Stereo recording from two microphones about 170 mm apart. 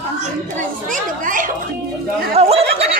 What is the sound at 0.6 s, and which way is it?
Speech, 50° right (ahead or behind).